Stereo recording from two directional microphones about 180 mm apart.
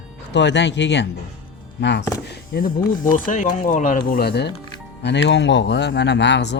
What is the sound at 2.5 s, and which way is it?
Speech, 60° left (ahead or behind).